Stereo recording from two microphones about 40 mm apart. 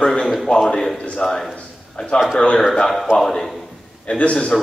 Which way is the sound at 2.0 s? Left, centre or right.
Left.